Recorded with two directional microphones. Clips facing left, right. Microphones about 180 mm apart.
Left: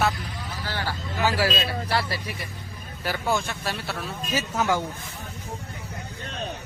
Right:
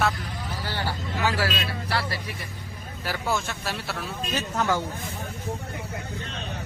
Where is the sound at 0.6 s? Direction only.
15° right (ahead or behind).